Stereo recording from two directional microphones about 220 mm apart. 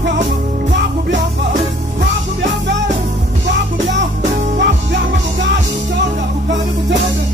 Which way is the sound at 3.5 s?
55° right (ahead or behind).